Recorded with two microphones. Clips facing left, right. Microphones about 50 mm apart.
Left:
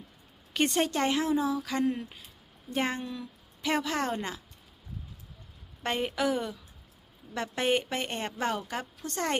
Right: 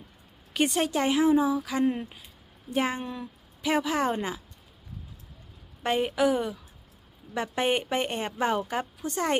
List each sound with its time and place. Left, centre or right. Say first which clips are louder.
0.5 s a woman's voice: right 2 dB; centre
1.8 s speech: right 3 dB; right
2.7 s a woman's voice: right 3 dB; centre
3.0 s speech: right 2 dB; right
3.6 s a woman's voice: right 3 dB; centre
5.8 s a woman's voice: right 5 dB; centre